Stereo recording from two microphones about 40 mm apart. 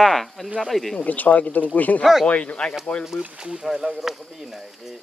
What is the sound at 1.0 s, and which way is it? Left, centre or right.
Speech, left.